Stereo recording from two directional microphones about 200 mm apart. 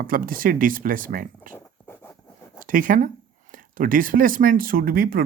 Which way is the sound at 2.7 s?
45° right (ahead or behind).